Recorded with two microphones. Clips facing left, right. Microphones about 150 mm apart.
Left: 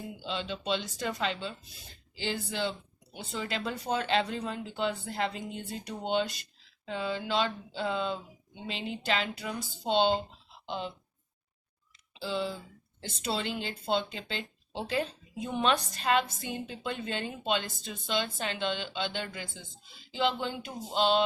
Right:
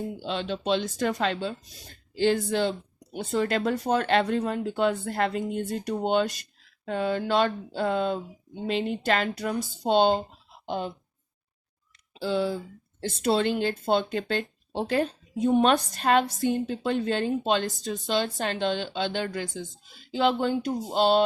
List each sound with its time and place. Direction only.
0.0 s speech: 45° right (ahead or behind)
12.1 s speech: 50° right (ahead or behind)